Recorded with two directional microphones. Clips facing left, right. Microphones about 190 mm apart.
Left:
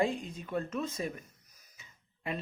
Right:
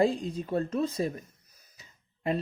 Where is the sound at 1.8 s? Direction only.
35° right (ahead or behind).